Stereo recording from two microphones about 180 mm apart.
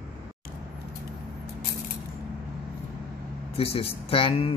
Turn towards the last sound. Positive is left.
turn(degrees=30)  # may be behind; listen again after turning